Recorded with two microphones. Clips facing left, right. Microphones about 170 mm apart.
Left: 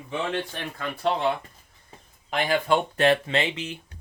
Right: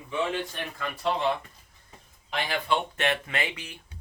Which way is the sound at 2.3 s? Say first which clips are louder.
Left 5 dB; 45° left (ahead or behind).